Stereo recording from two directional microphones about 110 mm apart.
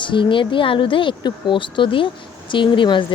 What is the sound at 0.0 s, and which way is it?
Speech, 50° left (ahead or behind).